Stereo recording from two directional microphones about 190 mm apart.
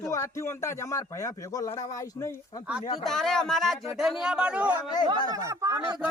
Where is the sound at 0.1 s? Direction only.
15° left (ahead or behind).